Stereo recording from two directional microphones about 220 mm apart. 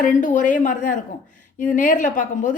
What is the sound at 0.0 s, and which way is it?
A woman's voice, 35° left (ahead or behind).